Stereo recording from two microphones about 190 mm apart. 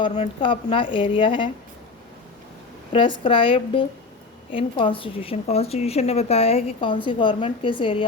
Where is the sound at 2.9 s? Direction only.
25° left (ahead or behind).